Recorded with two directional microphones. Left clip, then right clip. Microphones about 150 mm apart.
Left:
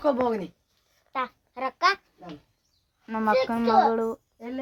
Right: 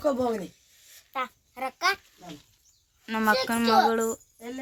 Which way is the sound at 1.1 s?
75° left (ahead or behind).